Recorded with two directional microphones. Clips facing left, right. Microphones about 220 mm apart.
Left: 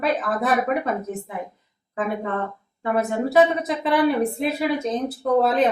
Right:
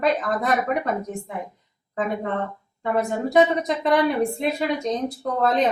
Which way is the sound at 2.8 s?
5° left (ahead or behind).